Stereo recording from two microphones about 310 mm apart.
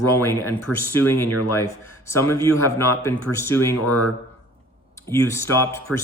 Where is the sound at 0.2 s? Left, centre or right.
Centre.